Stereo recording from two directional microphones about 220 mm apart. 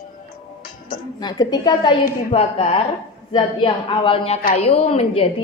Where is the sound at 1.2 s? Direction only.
20° left (ahead or behind).